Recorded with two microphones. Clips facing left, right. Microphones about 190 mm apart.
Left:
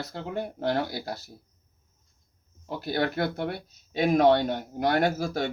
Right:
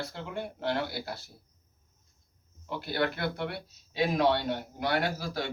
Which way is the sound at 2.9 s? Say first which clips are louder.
Left 3 dB; 45° left (ahead or behind).